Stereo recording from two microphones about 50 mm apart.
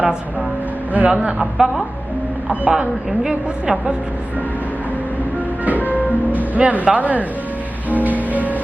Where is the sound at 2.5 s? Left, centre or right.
Right.